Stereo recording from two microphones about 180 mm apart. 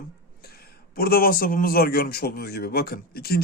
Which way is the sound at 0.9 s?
55° left (ahead or behind).